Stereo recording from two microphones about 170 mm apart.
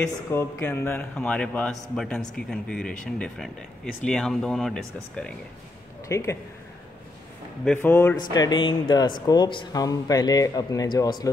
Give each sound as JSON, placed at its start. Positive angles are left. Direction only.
{"t": 0.0, "sound": "speech", "side_deg": 15}
{"t": 6.0, "sound": "speech", "side_deg": 15}
{"t": 7.6, "sound": "speech", "side_deg": 10}
{"t": 8.2, "sound": "speech", "side_deg": 25}